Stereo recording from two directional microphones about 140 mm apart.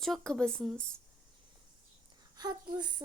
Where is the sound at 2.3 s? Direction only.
30° right (ahead or behind).